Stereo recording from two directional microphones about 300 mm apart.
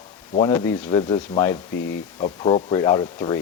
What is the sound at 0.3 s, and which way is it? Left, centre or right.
Speech, centre.